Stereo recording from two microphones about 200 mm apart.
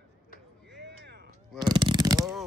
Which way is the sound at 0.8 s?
60° right (ahead or behind).